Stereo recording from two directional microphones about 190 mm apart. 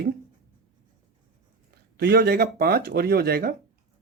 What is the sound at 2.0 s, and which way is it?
Speech, 60° right (ahead or behind).